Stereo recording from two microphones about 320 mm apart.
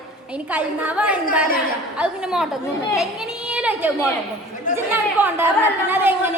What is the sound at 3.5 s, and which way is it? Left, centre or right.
A woman's voice, centre.